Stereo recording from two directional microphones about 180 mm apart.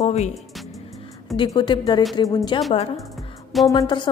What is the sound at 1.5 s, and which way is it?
A woman's voice, 25° left (ahead or behind).